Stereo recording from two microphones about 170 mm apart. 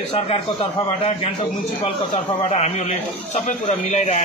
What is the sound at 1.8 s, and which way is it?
A man's voice, 35° left (ahead or behind).